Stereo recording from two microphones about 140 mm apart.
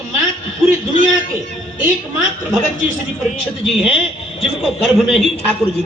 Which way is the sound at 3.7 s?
5° right (ahead or behind).